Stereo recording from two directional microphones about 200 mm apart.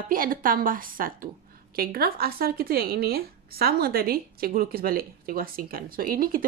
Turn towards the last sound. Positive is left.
turn(degrees=-45)  # may be behind; listen again after turning